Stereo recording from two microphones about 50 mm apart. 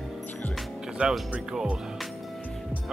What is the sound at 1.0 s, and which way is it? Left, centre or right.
Speech, right.